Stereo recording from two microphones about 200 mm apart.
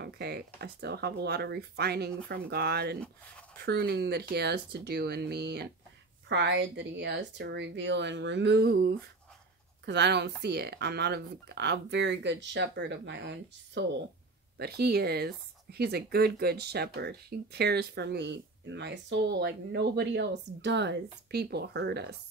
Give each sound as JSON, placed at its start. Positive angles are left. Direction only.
{"t": 0.0, "sound": "speech", "side_deg": -55}